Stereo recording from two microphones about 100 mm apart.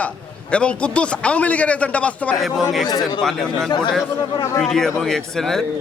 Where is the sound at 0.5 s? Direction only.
10° left (ahead or behind).